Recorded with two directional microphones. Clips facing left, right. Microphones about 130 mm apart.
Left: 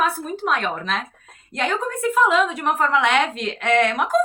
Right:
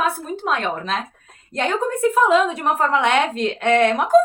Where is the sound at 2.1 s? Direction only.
30° right (ahead or behind).